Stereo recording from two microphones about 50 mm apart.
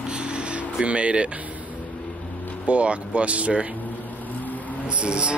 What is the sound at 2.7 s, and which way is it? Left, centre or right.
Speech, right.